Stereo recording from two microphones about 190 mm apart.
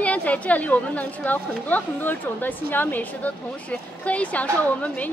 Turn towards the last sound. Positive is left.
turn(degrees=5)  # may be behind; listen again after turning